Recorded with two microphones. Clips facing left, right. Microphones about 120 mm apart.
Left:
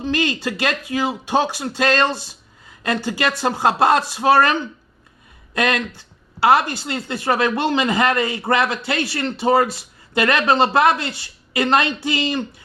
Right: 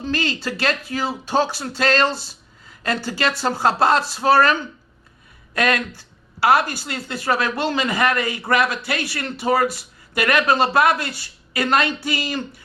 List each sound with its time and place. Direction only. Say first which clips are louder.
0.0 s speech: left 3 dB; 20° left (ahead or behind)